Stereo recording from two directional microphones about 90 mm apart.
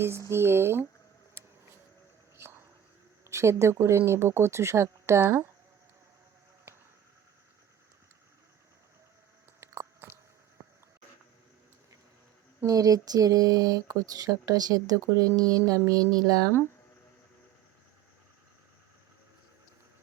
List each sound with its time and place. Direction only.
0.3 s speech: 25° right (ahead or behind)
1.4 s vehicle: 30° right (ahead or behind)
2.4 s whispering: 25° right (ahead or behind)
3.2 s speech: 30° right (ahead or behind)
9.6 s chewing: 30° right (ahead or behind)
12.6 s speech: 40° right (ahead or behind)